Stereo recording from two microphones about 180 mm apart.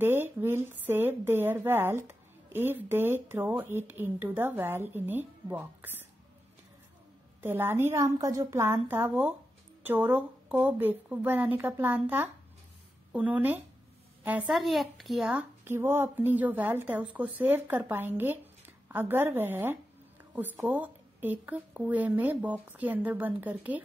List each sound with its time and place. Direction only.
0.0 s a woman's voice: 10° right (ahead or behind)
7.4 s speech: 10° right (ahead or behind)